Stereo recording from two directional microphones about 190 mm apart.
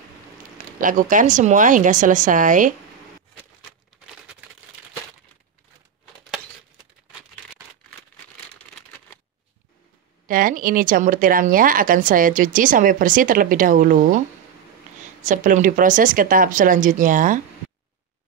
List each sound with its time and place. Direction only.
0.7 s speech: 45° right (ahead or behind)
8.5 s a sound: 5° left (ahead or behind)
10.2 s speech: 45° right (ahead or behind)
15.2 s speech: 45° right (ahead or behind)